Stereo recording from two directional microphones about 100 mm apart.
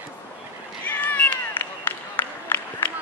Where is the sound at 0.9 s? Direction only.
15° left (ahead or behind).